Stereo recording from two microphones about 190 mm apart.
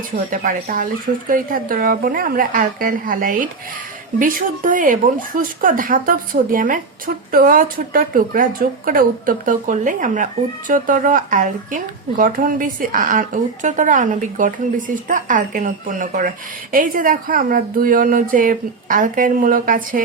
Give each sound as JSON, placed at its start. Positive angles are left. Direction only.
{"t": 0.3, "sound": "a woman's voice", "side_deg": -50}